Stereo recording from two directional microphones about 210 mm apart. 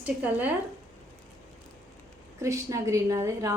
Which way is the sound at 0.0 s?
5° right (ahead or behind).